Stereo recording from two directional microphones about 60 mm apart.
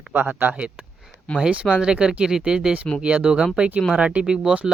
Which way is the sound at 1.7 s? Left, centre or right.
Centre.